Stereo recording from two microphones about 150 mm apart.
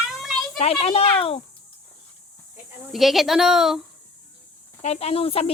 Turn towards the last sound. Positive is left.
turn(degrees=40)  # may be behind; listen again after turning